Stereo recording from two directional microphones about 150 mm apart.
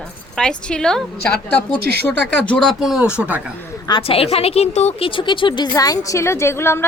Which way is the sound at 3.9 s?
40° left (ahead or behind).